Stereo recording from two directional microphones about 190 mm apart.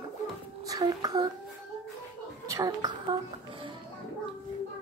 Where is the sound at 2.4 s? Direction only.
20° right (ahead or behind).